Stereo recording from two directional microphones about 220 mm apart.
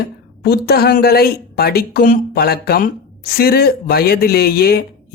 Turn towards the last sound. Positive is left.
turn(degrees=45)  # may be behind; listen again after turning